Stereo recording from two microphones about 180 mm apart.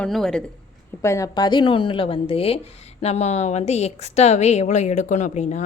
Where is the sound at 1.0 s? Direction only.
15° left (ahead or behind).